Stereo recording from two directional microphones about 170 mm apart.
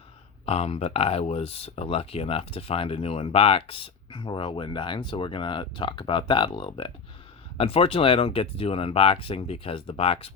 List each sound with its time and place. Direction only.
0.4 s speech: 35° left (ahead or behind)